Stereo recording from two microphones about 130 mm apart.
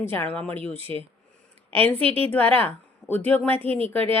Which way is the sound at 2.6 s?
15° left (ahead or behind).